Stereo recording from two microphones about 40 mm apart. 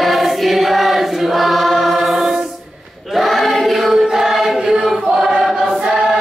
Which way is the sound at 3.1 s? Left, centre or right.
Centre.